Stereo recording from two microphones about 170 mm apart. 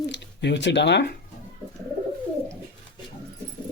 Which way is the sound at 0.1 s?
90° left.